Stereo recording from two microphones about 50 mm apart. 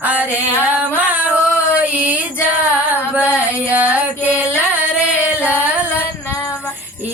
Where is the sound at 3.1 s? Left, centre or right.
Right.